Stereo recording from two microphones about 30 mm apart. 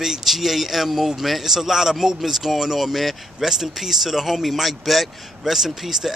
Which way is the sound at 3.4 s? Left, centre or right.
Centre.